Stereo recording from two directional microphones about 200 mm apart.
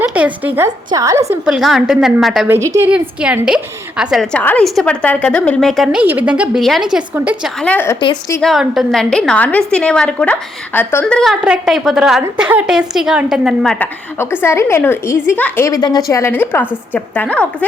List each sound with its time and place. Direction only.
0.0 s a woman's voice: 5° right (ahead or behind)
1.5 s a woman's voice: 5° right (ahead or behind)
2.6 s a woman's voice: 15° right (ahead or behind)
7.6 s a woman's voice: 10° left (ahead or behind)
8.0 s a woman's voice: 20° left (ahead or behind)
8.4 s a woman's voice: centre (ahead or behind)